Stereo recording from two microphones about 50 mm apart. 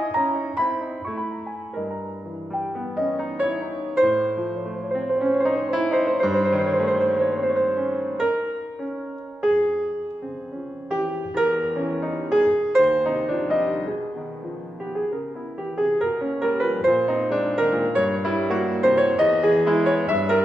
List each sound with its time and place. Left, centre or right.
0.6 s music: centre
2.6 s music: centre
4.8 s music: centre
9.4 s music: centre
10.9 s music: centre
15.8 s music: centre
17.6 s music: centre
18.0 s music: centre
18.9 s music: centre
19.4 s music: centre